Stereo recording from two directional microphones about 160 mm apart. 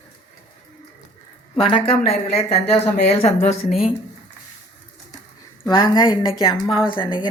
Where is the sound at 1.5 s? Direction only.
35° left (ahead or behind).